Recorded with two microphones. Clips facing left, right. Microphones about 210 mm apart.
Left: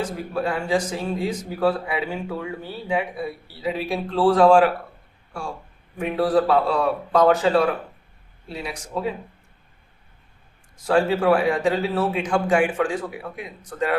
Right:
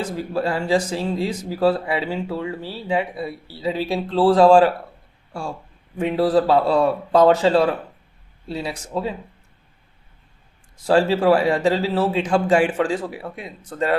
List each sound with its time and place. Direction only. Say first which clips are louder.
0.3 s speech: right 2 dB; 30° right (ahead or behind)
6.0 s a man's voice: right 2 dB; 30° right (ahead or behind)
10.8 s a man's voice: right 2 dB; 30° right (ahead or behind)